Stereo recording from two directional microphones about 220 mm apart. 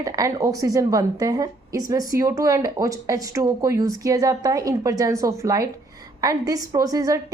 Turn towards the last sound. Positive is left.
turn(degrees=-15)  # may be behind; listen again after turning